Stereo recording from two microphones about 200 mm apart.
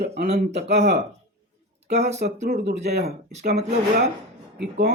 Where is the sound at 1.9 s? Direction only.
35° right (ahead or behind).